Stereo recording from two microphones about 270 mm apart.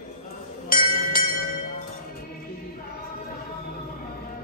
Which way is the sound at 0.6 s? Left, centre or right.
Left.